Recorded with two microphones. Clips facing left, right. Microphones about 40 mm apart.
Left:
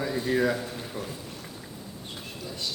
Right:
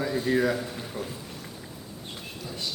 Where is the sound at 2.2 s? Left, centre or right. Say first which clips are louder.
Even; centre.